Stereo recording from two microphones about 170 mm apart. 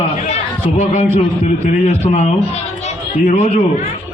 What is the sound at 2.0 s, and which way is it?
A man's voice, 40° left (ahead or behind).